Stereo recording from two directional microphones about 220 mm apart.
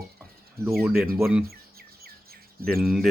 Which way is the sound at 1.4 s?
45° right (ahead or behind).